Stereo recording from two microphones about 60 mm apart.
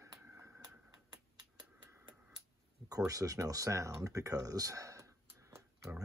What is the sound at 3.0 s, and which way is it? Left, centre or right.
Speech, right.